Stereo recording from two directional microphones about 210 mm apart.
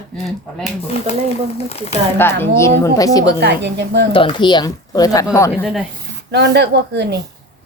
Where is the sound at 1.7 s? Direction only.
30° left (ahead or behind).